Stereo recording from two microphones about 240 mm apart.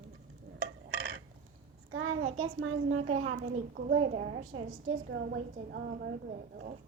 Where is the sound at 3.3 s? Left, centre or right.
Right.